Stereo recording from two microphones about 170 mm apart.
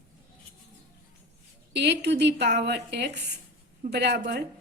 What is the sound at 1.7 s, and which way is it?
A woman's voice, 75° right (ahead or behind).